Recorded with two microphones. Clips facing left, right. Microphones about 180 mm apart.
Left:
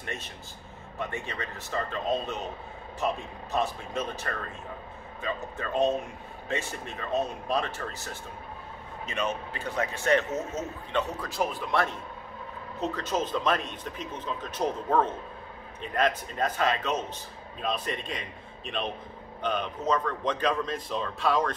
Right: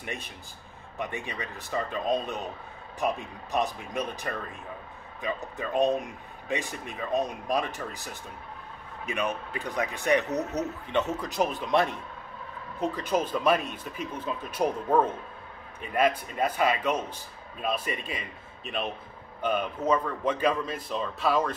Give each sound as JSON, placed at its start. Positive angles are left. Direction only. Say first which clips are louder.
{"t": 0.0, "sound": "speech", "louder": "even", "side_deg": -15}
{"t": 19.4, "sound": "speech", "louder": "right 2 dB", "side_deg": -10}